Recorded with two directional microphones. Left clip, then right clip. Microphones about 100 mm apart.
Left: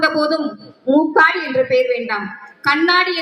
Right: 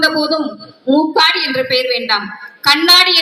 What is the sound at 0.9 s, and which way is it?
Speech, 25° left (ahead or behind).